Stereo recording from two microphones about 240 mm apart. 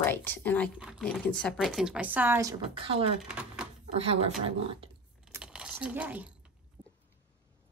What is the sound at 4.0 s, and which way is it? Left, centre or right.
Speech, right.